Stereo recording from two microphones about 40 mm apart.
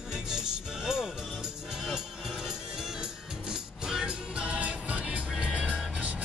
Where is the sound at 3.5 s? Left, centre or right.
Centre.